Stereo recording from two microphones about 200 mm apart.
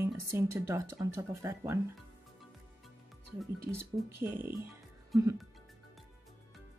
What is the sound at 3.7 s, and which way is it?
Speech, 15° right (ahead or behind).